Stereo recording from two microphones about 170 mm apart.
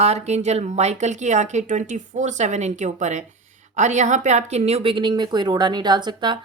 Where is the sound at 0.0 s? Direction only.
40° right (ahead or behind).